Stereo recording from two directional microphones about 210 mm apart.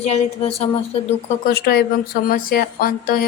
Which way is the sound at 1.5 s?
45° left (ahead or behind).